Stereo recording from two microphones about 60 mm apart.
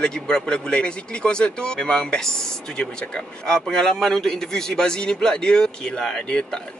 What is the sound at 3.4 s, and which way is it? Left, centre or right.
Speech, centre.